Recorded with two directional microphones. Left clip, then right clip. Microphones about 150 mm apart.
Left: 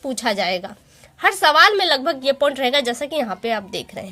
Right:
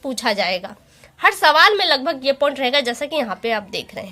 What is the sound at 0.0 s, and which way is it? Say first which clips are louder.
A woman's voice: right 1 dB; 35° left (ahead or behind).